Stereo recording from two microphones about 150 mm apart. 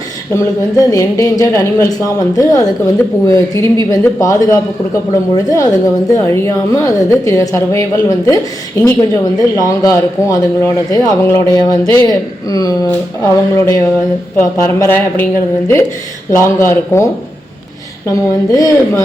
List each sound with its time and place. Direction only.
0.3 s a man's voice: 20° left (ahead or behind)